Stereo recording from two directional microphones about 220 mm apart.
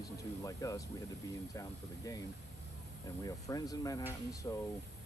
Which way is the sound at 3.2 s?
15° left (ahead or behind).